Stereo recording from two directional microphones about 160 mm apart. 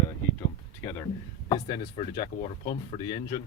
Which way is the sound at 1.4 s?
25° left (ahead or behind).